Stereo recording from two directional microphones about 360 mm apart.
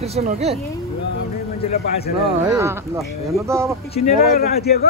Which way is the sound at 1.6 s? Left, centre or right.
Left.